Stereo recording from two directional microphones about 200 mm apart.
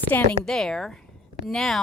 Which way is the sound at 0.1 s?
5° left (ahead or behind).